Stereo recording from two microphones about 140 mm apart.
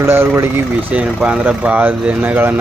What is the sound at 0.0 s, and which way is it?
Speech, 15° right (ahead or behind).